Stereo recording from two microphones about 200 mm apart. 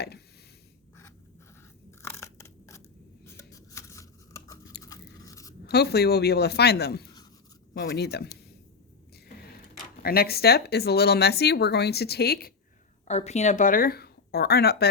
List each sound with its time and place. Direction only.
2.0 s crunch: 15° left (ahead or behind)
3.2 s a sound: 15° left (ahead or behind)
4.8 s crunch: 15° left (ahead or behind)
5.6 s a woman's voice: 55° left (ahead or behind)
10.0 s speech: 50° left (ahead or behind)
13.1 s speech: 35° left (ahead or behind); by 14.8 s 50° left (ahead or behind)